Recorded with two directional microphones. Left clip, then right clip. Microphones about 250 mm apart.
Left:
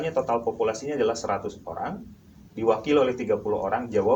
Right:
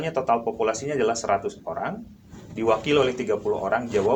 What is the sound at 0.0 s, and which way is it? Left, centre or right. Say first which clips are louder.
Speech: right 2 dB; right.